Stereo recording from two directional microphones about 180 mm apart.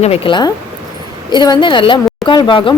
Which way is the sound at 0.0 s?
30° left (ahead or behind).